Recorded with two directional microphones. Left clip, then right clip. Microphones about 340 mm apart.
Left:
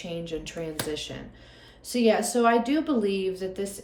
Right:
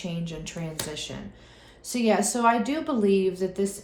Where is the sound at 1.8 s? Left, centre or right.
Centre.